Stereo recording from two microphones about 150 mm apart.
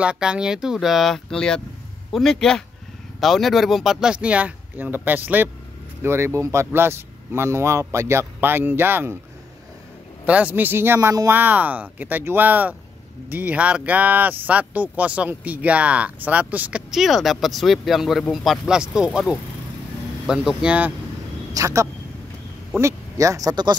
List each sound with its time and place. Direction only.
0.0 s speech: 5° right (ahead or behind)
10.2 s speech: 10° right (ahead or behind)
21.5 s speech: 20° right (ahead or behind)